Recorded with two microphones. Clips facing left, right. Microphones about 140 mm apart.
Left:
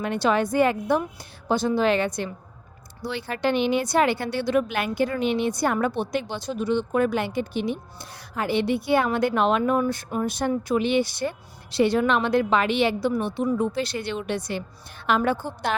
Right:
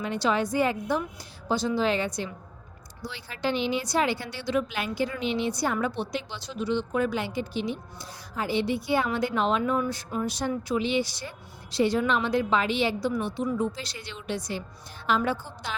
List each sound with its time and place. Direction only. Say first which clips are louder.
0.0 s a woman's voice: left 4 dB; 60° left (ahead or behind)